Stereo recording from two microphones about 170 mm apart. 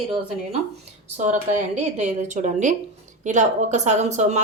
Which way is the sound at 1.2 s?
45° right (ahead or behind).